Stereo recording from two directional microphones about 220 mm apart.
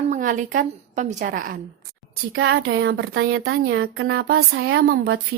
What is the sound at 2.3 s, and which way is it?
Speech, 60° right (ahead or behind).